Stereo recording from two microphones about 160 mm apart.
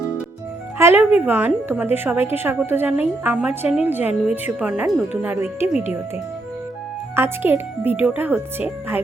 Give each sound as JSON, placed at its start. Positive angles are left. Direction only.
{"t": 0.8, "sound": "a woman's voice", "side_deg": -15}
{"t": 7.2, "sound": "a woman's voice", "side_deg": -15}